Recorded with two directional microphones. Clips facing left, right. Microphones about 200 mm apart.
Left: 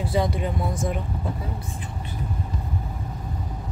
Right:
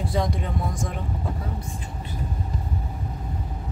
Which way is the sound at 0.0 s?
5° left (ahead or behind).